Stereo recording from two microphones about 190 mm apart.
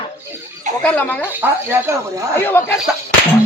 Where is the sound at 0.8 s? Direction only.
5° left (ahead or behind).